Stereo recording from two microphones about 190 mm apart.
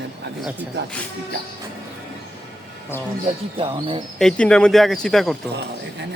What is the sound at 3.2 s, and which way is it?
Speech, 30° right (ahead or behind).